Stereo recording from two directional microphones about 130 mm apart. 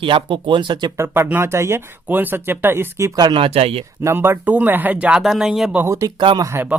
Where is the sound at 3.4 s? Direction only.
50° right (ahead or behind).